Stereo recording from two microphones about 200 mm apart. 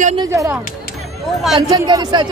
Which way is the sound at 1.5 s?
20° right (ahead or behind).